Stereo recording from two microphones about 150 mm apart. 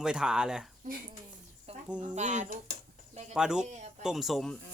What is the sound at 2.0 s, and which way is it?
Speech, 50° right (ahead or behind).